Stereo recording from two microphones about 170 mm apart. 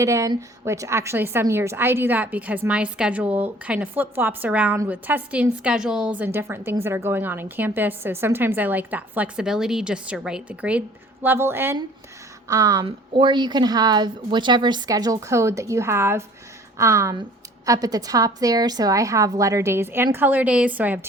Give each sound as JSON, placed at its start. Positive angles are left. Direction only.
{"t": 0.0, "sound": "a woman's voice", "side_deg": -20}